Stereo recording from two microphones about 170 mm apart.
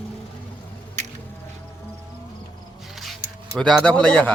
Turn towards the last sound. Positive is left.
turn(degrees=5)  # may be behind; listen again after turning